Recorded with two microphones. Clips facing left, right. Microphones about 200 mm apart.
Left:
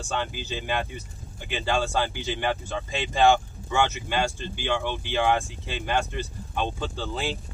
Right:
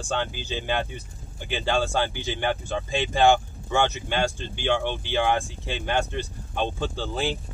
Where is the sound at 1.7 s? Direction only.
15° right (ahead or behind).